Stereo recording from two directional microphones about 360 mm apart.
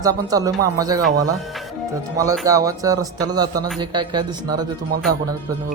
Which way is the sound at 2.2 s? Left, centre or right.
Centre.